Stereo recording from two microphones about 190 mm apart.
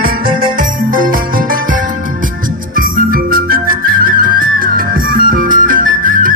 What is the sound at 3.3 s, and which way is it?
Music, 50° right (ahead or behind).